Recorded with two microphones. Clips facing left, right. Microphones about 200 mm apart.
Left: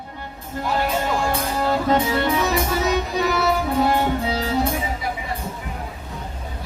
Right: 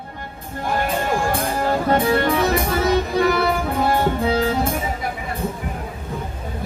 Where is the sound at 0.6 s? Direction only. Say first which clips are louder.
Right 1 dB; 50° right (ahead or behind).